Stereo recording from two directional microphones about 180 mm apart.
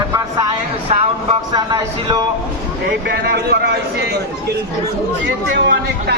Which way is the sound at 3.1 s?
60° right (ahead or behind).